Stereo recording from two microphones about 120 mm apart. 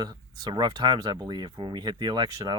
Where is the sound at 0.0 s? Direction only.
35° right (ahead or behind).